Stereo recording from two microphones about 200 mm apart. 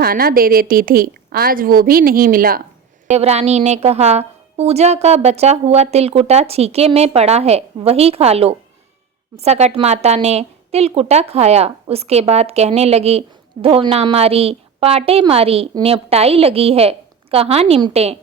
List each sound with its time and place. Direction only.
0.0 s a woman's voice: 50° right (ahead or behind)
3.2 s a woman's voice: 30° right (ahead or behind)